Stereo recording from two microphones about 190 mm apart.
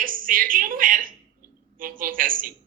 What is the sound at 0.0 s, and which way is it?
A woman's voice, 45° right (ahead or behind).